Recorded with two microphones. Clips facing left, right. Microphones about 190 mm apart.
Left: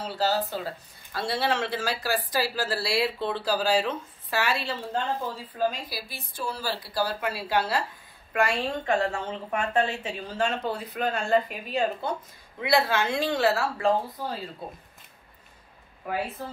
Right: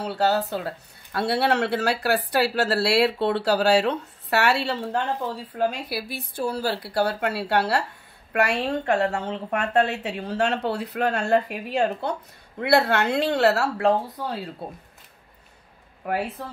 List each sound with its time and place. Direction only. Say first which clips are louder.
0.0 s a woman's voice: right 4 dB; 60° right (ahead or behind)